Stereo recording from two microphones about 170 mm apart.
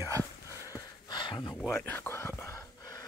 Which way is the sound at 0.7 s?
25° left (ahead or behind).